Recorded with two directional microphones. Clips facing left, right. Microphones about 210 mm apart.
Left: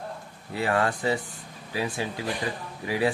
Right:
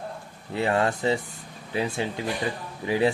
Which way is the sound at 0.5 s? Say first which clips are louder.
Right 2 dB; 25° right (ahead or behind).